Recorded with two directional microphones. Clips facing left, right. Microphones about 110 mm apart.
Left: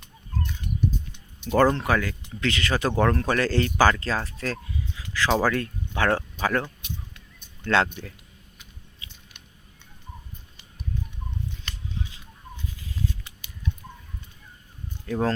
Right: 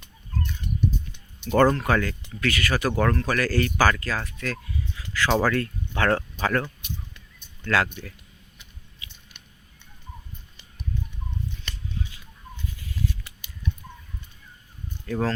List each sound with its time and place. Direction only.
1.5 s speech: 10° left (ahead or behind)
2.4 s speech: 25° left (ahead or behind)
7.6 s speech: 25° left (ahead or behind)
15.0 s speech: 15° left (ahead or behind)